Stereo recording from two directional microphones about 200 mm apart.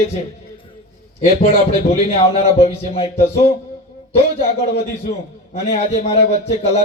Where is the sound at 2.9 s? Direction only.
30° left (ahead or behind).